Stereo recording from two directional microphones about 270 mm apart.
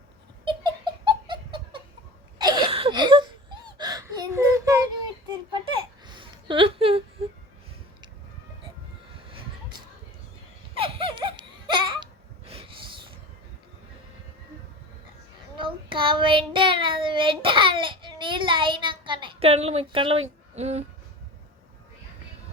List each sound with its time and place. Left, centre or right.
0.4 s laughter: centre
2.4 s whimper: centre
5.3 s a sound: centre
10.8 s baby cry: centre
12.5 s a sound: right
15.5 s child singing: centre